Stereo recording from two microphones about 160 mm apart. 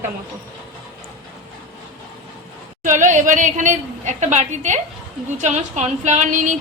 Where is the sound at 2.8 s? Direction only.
50° right (ahead or behind).